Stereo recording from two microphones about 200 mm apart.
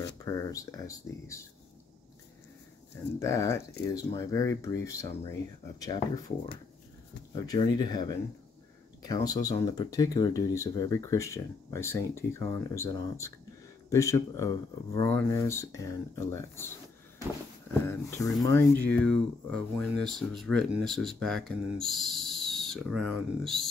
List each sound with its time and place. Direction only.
0.2 s speech: 15° left (ahead or behind)
3.2 s speech: 15° left (ahead or behind)
7.3 s speech: 20° left (ahead or behind)
17.8 s speech: 15° left (ahead or behind)